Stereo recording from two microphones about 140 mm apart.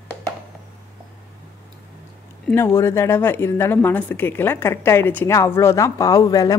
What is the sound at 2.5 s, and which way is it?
A woman's voice, 15° left (ahead or behind).